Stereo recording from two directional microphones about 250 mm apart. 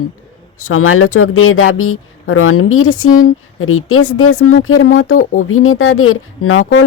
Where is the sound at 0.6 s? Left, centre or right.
Left.